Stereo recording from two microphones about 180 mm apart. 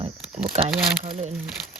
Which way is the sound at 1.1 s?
40° right (ahead or behind).